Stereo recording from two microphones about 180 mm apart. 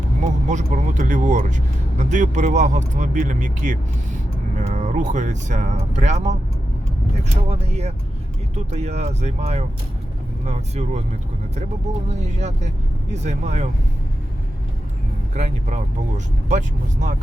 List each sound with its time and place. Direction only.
0.4 s speech: 45° right (ahead or behind)
7.4 s speech: 35° right (ahead or behind)
12.2 s speech: 40° right (ahead or behind)
15.4 s speech: 40° right (ahead or behind)